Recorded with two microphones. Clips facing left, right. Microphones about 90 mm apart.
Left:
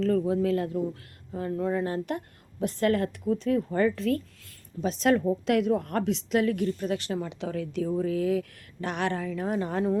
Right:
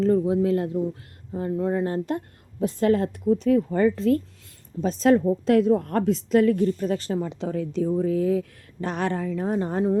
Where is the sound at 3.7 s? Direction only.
30° right (ahead or behind).